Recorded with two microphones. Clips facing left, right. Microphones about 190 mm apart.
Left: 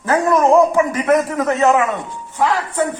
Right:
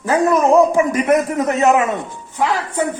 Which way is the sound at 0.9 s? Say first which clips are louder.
Right 1 dB; 20° right (ahead or behind).